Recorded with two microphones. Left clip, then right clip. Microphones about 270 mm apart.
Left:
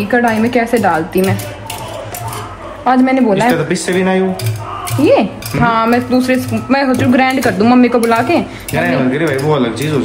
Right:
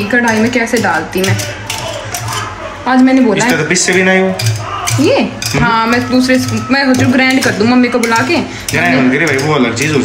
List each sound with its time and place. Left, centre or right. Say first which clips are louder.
0.1 s speech: right 1 dB; left
2.9 s speech: right 1 dB; left
3.7 s speech: right 5 dB; centre
5.0 s speech: left 2 dB; left
8.7 s speech: right 3 dB; centre